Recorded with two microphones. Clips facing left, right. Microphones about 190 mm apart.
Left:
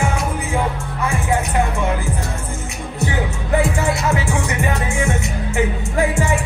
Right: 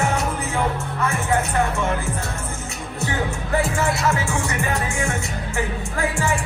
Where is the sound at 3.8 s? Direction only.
15° left (ahead or behind).